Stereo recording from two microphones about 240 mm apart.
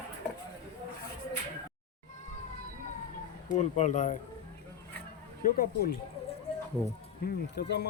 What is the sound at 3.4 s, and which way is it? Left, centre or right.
Speech, left.